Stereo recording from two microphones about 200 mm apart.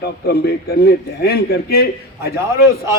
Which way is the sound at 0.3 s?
50° left (ahead or behind).